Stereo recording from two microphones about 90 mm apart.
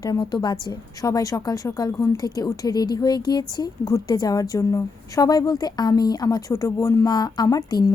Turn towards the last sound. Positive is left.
turn(degrees=45)  # may be behind; listen again after turning